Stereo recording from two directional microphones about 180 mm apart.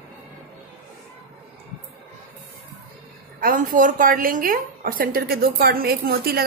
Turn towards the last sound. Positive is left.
turn(degrees=-60)  # may be behind; listen again after turning